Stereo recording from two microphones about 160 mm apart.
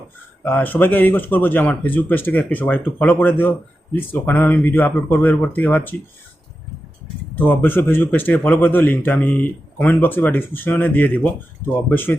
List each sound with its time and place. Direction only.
0.4 s speech: 10° left (ahead or behind)
7.3 s speech: 10° left (ahead or behind)